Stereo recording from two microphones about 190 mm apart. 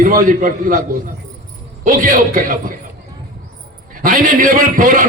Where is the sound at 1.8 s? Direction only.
45° right (ahead or behind).